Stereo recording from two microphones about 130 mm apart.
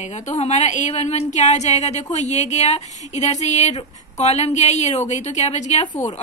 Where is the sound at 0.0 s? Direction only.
60° left (ahead or behind).